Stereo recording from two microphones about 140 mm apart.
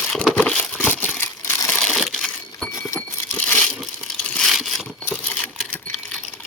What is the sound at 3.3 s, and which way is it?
Crushing, 10° left (ahead or behind).